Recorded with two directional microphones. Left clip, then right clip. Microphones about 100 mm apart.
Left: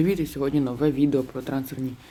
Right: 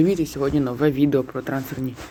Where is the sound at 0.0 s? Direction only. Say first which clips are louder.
Right 4 dB; 5° right (ahead or behind).